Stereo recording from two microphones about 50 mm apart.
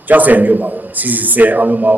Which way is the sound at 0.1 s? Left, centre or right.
Right.